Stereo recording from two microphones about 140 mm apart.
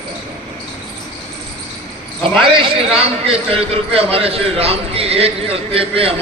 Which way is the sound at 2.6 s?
45° right (ahead or behind).